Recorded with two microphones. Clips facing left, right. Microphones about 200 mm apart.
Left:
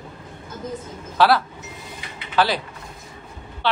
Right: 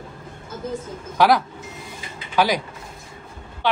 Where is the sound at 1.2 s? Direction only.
15° right (ahead or behind).